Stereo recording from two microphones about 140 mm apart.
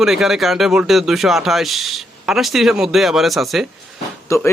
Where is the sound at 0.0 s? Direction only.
Centre (ahead or behind).